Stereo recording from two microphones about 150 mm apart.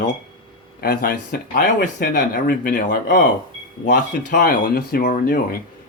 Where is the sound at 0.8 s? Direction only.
80° left.